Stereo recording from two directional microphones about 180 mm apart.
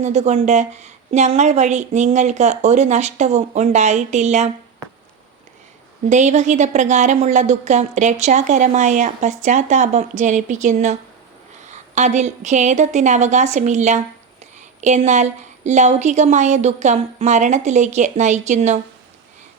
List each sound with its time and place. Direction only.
0.0 s a woman's voice: 40° right (ahead or behind)
6.1 s a woman's voice: 40° right (ahead or behind)